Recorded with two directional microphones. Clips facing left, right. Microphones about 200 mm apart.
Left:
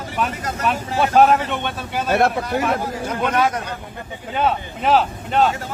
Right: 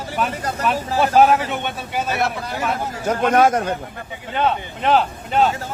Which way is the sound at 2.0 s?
50° left (ahead or behind).